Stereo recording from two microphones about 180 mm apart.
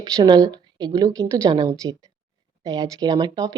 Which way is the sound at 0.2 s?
20° right (ahead or behind).